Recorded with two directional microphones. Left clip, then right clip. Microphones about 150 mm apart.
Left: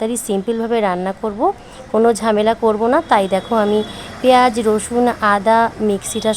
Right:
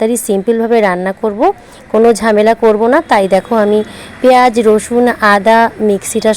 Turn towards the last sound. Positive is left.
turn(degrees=-20)  # may be behind; listen again after turning